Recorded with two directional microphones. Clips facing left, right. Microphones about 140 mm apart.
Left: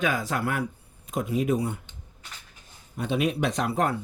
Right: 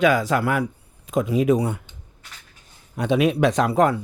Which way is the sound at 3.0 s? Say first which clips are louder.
Right 7 dB; 90° right.